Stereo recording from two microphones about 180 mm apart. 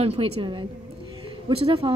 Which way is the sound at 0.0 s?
30° right (ahead or behind).